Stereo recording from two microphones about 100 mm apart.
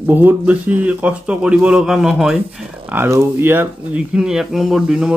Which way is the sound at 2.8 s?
20° right (ahead or behind).